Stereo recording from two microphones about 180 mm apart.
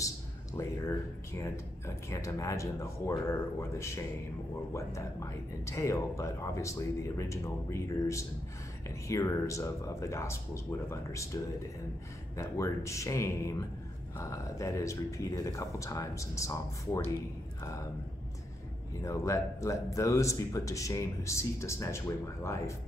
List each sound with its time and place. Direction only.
0.6 s speech: 15° left (ahead or behind)
12.4 s speech: 15° left (ahead or behind)
18.9 s speech: 15° left (ahead or behind)